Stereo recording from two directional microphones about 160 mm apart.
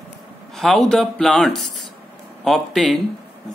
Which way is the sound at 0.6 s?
Centre (ahead or behind).